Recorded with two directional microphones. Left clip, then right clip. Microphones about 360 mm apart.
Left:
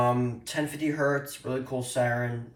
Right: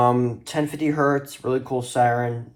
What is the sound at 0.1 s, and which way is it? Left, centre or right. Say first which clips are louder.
Speech: right 6 dB; centre.